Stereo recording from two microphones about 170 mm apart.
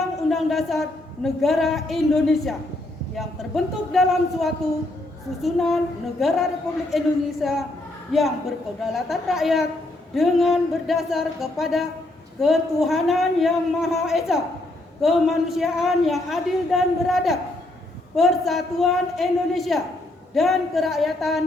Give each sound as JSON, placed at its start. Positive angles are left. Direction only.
{"t": 0.3, "sound": "a man's voice", "side_deg": 0}